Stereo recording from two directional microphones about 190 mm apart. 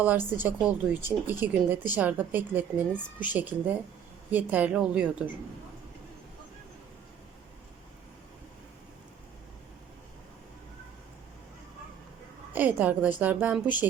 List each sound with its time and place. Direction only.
0.0 s speech: 10° right (ahead or behind)
12.5 s speech: 10° right (ahead or behind)